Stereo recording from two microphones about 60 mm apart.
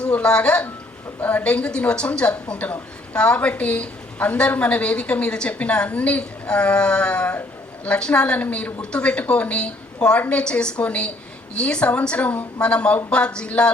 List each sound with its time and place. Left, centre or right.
0.0 s a woman's voice: centre